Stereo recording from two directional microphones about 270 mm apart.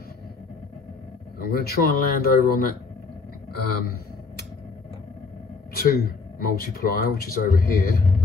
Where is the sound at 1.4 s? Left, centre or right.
Left.